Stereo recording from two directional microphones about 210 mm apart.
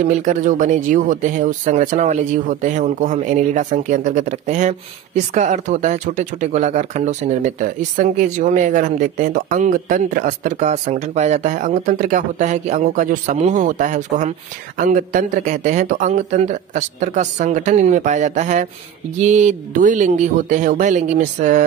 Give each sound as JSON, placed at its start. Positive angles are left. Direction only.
{"t": 0.0, "sound": "speech", "side_deg": -35}